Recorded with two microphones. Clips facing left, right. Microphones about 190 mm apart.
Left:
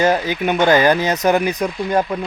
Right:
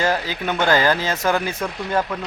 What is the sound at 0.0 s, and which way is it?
Speech, 20° left (ahead or behind).